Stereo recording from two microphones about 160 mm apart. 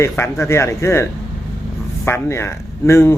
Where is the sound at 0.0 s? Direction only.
15° left (ahead or behind).